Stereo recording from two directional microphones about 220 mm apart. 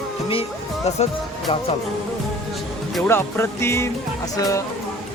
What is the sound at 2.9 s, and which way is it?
Speech, 10° left (ahead or behind).